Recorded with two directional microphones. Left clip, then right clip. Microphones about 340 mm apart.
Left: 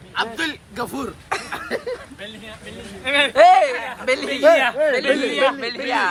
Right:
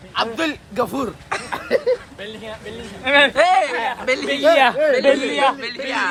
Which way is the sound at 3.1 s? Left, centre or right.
Right.